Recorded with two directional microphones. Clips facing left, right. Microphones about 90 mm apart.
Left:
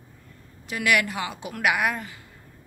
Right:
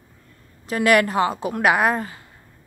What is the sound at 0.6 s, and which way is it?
A woman's voice, 40° right (ahead or behind).